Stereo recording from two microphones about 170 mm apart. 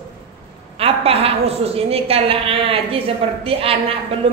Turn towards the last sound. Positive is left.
turn(degrees=-35)  # may be behind; listen again after turning